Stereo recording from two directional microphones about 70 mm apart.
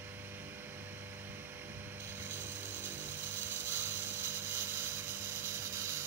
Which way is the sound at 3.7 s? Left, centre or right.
Right.